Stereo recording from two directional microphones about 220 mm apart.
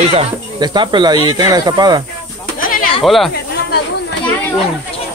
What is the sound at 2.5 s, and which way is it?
Goat, 40° left (ahead or behind).